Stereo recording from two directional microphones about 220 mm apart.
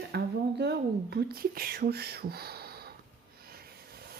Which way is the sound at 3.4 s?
45° right (ahead or behind).